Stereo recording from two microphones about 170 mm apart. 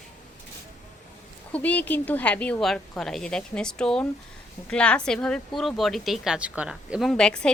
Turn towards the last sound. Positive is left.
turn(degrees=5)  # may be behind; listen again after turning